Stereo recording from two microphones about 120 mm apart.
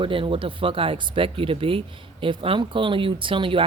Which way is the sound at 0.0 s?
45° right (ahead or behind).